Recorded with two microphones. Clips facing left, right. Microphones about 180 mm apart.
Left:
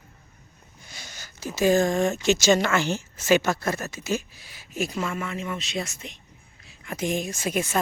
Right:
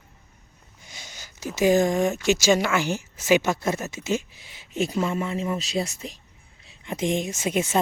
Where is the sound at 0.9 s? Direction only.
15° right (ahead or behind).